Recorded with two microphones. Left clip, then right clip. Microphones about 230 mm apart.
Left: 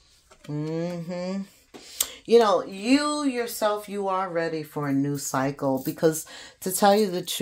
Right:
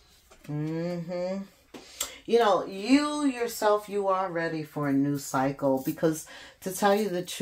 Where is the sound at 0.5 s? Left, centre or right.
Left.